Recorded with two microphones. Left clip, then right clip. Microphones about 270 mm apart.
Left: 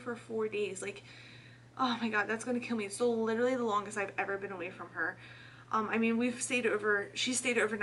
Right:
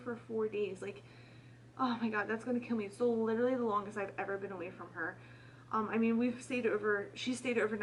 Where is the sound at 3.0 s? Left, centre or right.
Right.